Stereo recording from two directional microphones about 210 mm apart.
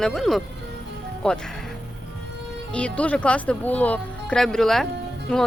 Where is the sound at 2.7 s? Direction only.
5° left (ahead or behind).